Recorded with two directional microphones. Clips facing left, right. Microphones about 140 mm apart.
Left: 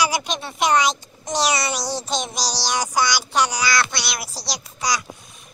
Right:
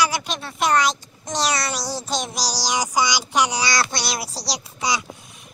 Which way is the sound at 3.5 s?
35° right (ahead or behind).